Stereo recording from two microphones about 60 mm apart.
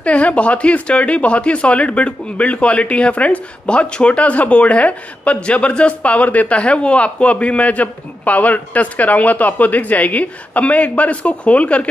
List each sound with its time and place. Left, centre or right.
0.0 s speech: left